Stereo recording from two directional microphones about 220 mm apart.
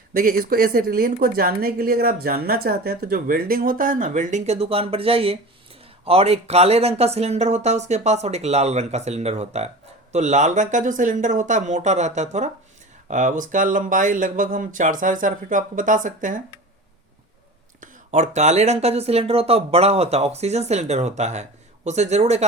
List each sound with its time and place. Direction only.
0.1 s speech: 40° right (ahead or behind)
17.7 s speech: 35° right (ahead or behind)